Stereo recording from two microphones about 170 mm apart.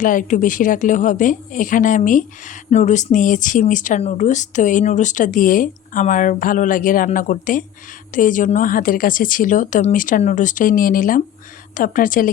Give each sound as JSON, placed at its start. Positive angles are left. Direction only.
{"t": 0.0, "sound": "a woman's voice", "side_deg": 50}